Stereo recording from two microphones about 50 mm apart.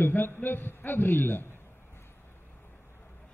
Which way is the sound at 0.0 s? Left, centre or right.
Left.